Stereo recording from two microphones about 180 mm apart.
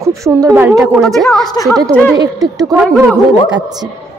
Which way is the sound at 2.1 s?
20° right (ahead or behind).